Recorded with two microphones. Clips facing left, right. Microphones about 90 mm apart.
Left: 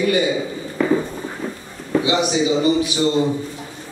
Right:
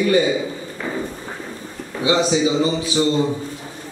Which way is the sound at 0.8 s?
80° left.